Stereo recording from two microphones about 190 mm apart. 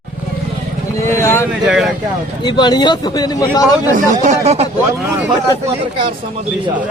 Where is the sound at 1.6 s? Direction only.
Centre (ahead or behind).